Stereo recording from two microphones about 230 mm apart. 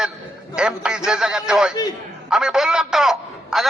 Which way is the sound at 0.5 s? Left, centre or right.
Centre.